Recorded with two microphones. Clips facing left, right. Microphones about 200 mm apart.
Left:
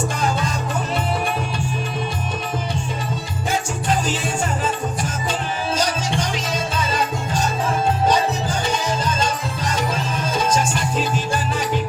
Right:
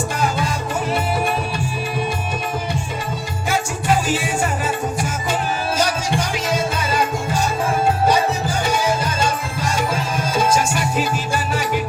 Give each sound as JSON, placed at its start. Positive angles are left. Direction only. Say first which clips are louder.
{"t": 0.2, "sound": "music", "louder": "right 3 dB", "side_deg": -10}
{"t": 3.8, "sound": "music", "louder": "right 4 dB", "side_deg": -10}